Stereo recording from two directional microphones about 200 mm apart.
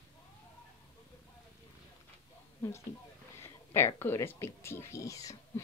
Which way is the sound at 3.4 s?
10° left (ahead or behind).